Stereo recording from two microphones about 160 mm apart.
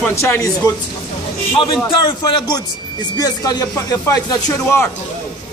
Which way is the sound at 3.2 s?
25° left (ahead or behind).